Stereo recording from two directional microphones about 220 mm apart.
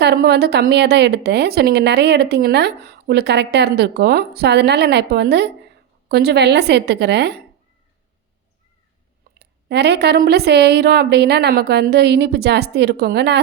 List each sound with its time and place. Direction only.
0.0 s a woman's voice: 50° right (ahead or behind)
9.4 s a woman's voice: 50° right (ahead or behind)